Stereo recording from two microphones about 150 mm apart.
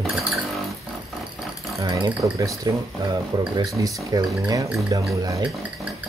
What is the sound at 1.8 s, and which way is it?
Speech, 25° right (ahead or behind).